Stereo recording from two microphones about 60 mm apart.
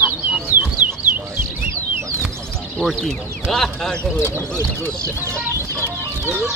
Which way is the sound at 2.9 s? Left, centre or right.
Centre.